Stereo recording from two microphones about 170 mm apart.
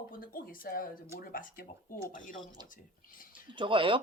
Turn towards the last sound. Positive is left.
turn(degrees=-30)  # may be behind; listen again after turning